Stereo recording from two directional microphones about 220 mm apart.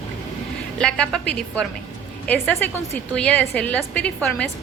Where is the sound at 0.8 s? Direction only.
5° left (ahead or behind).